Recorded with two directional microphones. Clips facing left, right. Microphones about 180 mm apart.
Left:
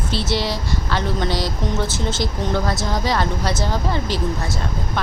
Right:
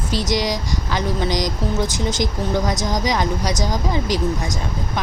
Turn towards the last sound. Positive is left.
turn(degrees=-15)  # may be behind; listen again after turning